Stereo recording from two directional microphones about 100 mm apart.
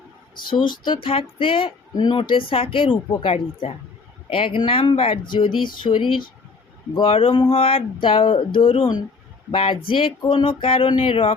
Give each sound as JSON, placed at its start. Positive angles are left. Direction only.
{"t": 0.6, "sound": "speech", "side_deg": 50}
{"t": 5.2, "sound": "speech", "side_deg": 55}
{"t": 7.0, "sound": "speech", "side_deg": 65}